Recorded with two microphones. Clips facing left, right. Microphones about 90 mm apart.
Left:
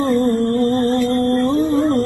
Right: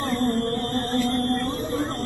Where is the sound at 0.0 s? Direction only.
25° left (ahead or behind).